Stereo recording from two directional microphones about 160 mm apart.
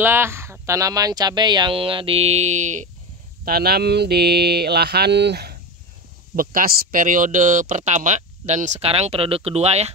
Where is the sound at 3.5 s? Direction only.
75° right (ahead or behind).